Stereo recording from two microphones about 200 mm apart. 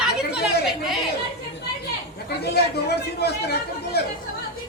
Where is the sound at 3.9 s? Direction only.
55° left (ahead or behind).